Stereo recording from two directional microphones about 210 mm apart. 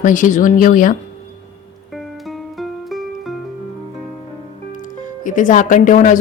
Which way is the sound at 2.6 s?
Centre (ahead or behind).